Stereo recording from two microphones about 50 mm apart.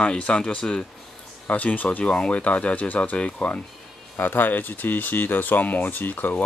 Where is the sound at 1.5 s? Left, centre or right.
Left.